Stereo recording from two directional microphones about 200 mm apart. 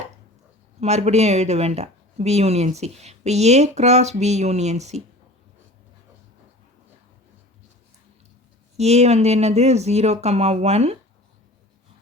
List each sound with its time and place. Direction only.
0.8 s speech: 35° right (ahead or behind)
8.8 s speech: 35° right (ahead or behind)